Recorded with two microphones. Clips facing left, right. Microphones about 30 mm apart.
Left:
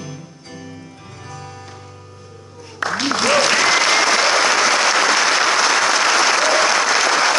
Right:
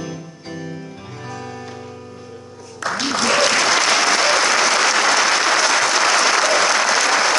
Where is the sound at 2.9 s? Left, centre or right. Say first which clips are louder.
Left 1 dB; centre.